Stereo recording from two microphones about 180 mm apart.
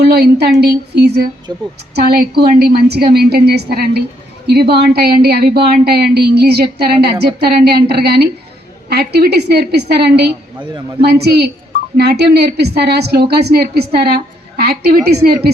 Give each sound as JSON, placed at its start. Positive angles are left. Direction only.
{"t": 0.0, "sound": "a woman's voice", "side_deg": -65}
{"t": 1.5, "sound": "a woman's voice", "side_deg": -20}
{"t": 2.0, "sound": "speech", "side_deg": -60}